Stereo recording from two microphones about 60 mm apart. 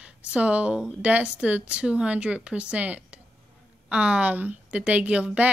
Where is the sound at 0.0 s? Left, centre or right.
Right.